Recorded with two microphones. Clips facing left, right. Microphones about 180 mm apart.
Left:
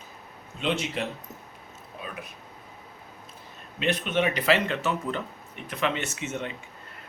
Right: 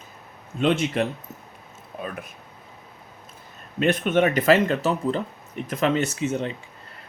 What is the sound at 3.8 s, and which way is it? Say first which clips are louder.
Speech: right 6 dB; 50° right (ahead or behind).